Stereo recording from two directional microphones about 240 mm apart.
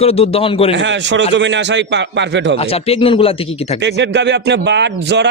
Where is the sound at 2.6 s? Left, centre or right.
Left.